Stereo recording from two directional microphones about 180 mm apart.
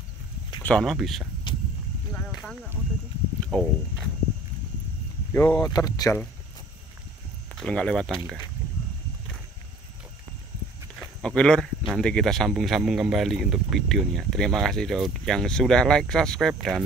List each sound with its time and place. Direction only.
0.6 s speech: 5° left (ahead or behind)
1.5 s a sound: 25° left (ahead or behind)
2.1 s a sound: 5° left (ahead or behind)
3.4 s speech: centre (ahead or behind)
5.3 s speech: 20° left (ahead or behind)
7.5 s speech: 5° left (ahead or behind)
11.0 s speech: 5° left (ahead or behind)